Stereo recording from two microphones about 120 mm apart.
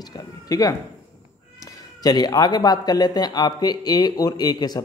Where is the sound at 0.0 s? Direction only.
35° left (ahead or behind).